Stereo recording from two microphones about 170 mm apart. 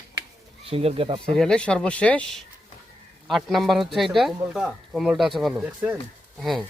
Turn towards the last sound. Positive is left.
turn(degrees=0)  # may be behind; listen again after turning